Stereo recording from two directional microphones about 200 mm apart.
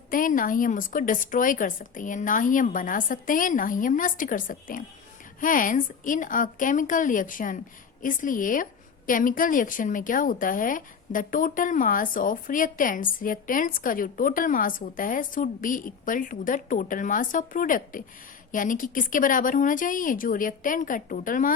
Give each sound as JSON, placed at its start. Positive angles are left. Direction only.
{"t": 0.1, "sound": "a woman's voice", "side_deg": 45}